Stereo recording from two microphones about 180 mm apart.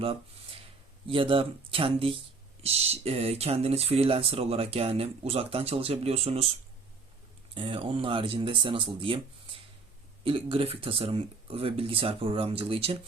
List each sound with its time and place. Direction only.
0.0 s speech: 30° right (ahead or behind)
7.5 s speech: 30° right (ahead or behind)
10.2 s speech: 30° right (ahead or behind)